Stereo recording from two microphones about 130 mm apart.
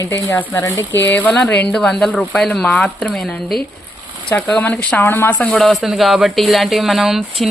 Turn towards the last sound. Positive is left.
turn(degrees=0)  # may be behind; listen again after turning